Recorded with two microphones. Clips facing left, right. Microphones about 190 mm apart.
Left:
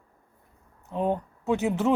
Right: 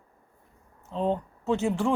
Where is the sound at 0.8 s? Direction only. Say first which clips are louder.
Left 1 dB; 15° left (ahead or behind).